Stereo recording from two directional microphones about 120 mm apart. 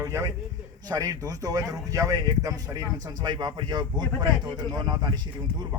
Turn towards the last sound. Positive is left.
turn(degrees=-35)  # may be behind; listen again after turning